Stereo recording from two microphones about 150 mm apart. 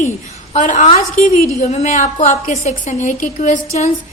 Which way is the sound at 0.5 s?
55° left (ahead or behind).